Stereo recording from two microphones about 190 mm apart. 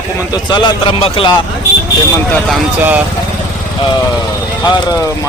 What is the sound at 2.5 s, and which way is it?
Speech, 10° right (ahead or behind).